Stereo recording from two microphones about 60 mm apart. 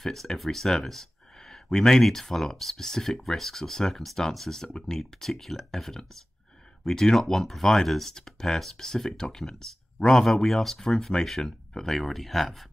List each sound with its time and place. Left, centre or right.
0.0 s speech: centre